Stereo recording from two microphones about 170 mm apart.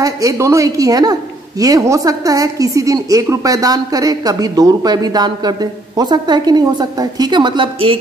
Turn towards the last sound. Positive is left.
turn(degrees=-30)  # may be behind; listen again after turning